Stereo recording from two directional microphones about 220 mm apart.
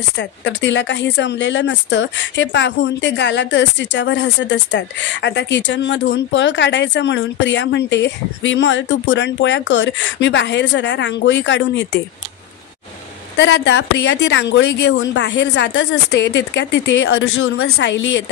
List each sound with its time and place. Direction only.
0.2 s speech: 55° left (ahead or behind)
13.4 s a woman's voice: 55° left (ahead or behind)
17.7 s speech: 55° left (ahead or behind)